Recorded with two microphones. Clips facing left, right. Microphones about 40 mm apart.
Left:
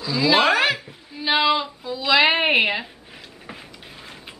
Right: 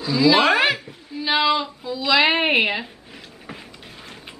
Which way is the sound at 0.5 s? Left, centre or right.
Centre.